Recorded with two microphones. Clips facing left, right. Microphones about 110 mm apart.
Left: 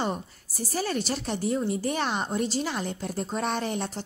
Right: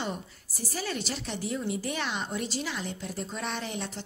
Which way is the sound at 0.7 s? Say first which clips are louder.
Left 5 dB; 40° left (ahead or behind).